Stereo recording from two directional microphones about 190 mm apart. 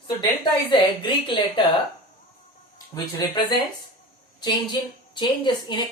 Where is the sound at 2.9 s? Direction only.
20° left (ahead or behind).